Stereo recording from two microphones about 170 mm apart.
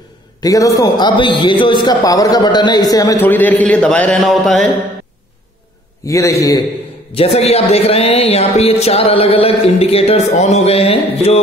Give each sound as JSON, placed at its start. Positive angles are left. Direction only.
{"t": 0.4, "sound": "a man's voice", "side_deg": 20}
{"t": 6.0, "sound": "a man's voice", "side_deg": 20}
{"t": 7.2, "sound": "a man's voice", "side_deg": 40}